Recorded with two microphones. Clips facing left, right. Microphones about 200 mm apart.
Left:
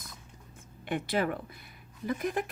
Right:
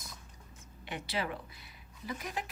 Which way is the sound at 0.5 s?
55° left (ahead or behind).